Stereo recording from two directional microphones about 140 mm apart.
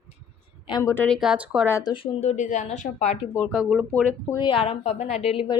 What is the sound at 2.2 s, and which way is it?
Speech, 60° left (ahead or behind).